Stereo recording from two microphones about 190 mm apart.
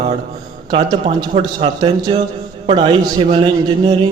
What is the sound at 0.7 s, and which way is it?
A man's voice, 30° right (ahead or behind).